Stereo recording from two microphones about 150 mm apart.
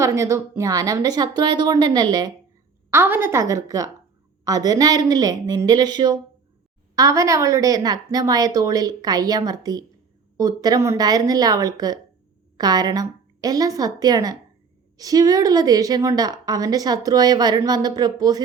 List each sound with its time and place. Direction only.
0.0 s a woman's voice: 20° right (ahead or behind)
2.9 s a woman's voice: 15° right (ahead or behind)